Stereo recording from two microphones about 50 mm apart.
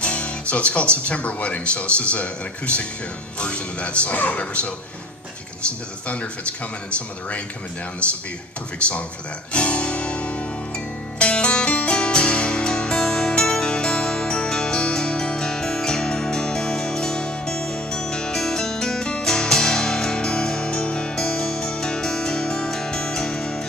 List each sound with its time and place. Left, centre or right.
0.0 s speech: left
6.0 s speech: left
8.7 s speech: left
9.5 s music: left